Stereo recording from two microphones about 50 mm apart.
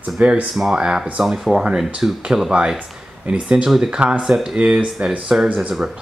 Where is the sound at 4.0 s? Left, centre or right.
Right.